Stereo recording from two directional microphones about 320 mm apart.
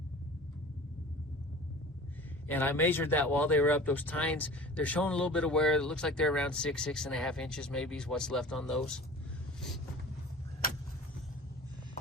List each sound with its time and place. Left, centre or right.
2.5 s speech: centre